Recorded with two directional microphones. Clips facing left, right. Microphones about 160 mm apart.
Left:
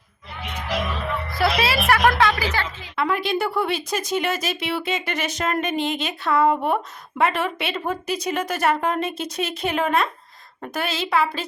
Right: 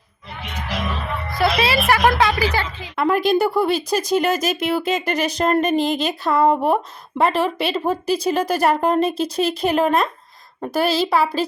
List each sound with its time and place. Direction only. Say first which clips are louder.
1.4 s a woman's voice: right 3 dB; centre (ahead or behind)
2.4 s speech: right 4 dB; 15° right (ahead or behind)
2.9 s speech: right 6 dB; 45° right (ahead or behind)